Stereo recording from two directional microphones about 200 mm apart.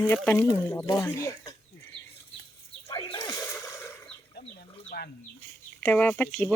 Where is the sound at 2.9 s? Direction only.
25° left (ahead or behind).